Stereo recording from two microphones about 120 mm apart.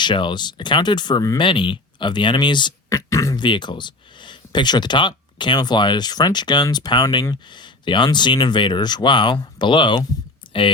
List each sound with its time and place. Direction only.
0.0 s speech: 40° left (ahead or behind)
2.9 s speech: 25° left (ahead or behind)
3.3 s speech: 40° left (ahead or behind)
10.5 s a sound: 45° left (ahead or behind)